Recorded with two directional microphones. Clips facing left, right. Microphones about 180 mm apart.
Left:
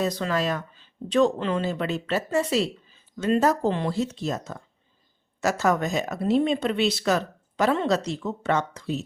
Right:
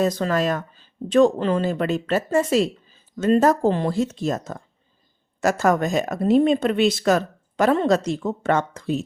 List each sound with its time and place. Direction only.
0.0 s speech: 45° right (ahead or behind)